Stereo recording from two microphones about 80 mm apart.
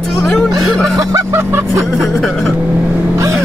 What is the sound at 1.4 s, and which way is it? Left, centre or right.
Vehicle, right.